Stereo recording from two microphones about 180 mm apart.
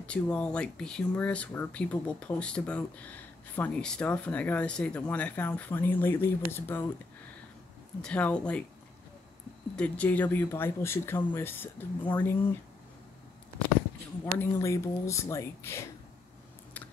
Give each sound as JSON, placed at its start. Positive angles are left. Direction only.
{"t": 0.0, "sound": "speech", "side_deg": 5}
{"t": 8.0, "sound": "speech", "side_deg": 5}
{"t": 9.8, "sound": "speech", "side_deg": 10}
{"t": 14.2, "sound": "speech", "side_deg": 15}